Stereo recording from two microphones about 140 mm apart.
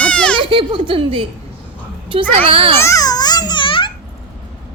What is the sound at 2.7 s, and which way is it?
Babbling, 20° left (ahead or behind).